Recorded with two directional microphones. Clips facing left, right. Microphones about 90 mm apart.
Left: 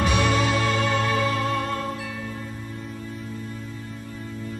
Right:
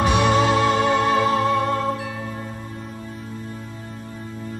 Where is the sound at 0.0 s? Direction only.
20° right (ahead or behind).